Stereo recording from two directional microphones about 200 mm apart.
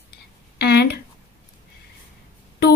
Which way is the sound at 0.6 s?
55° left (ahead or behind).